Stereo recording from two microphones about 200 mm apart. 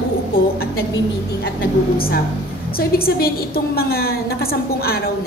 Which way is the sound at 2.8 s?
50° left (ahead or behind).